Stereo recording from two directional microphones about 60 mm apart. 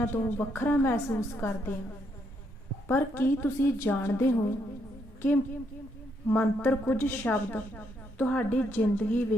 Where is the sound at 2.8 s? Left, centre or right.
Left.